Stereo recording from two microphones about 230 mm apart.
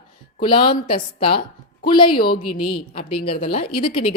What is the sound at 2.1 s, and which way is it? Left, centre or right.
Speech, left.